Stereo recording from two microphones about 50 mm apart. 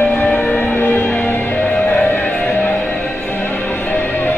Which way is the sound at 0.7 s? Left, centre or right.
Left.